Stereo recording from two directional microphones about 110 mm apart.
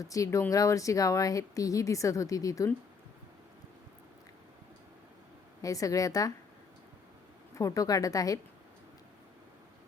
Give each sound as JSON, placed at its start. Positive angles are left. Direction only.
{"t": 0.0, "sound": "speech", "side_deg": 30}
{"t": 5.6, "sound": "speech", "side_deg": 30}
{"t": 7.5, "sound": "speech", "side_deg": 30}